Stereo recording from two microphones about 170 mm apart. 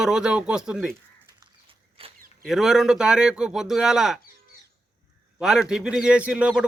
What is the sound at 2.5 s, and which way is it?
A man's voice, centre (ahead or behind).